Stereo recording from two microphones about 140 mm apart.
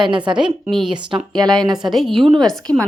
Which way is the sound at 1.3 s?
30° right (ahead or behind).